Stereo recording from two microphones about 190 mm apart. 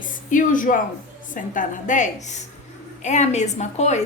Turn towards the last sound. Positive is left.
turn(degrees=35)  # may be behind; listen again after turning